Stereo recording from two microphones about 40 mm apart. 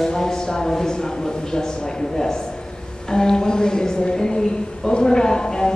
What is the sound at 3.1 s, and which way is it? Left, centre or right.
A woman's voice, centre.